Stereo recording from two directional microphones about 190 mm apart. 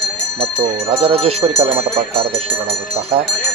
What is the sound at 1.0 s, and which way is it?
Speech, 30° right (ahead or behind).